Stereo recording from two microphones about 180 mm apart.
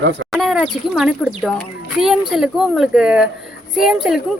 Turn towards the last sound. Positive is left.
turn(degrees=0)  # may be behind; listen again after turning